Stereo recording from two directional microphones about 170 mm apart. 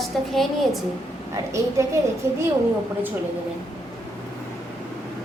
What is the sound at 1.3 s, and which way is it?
Speech, 15° right (ahead or behind).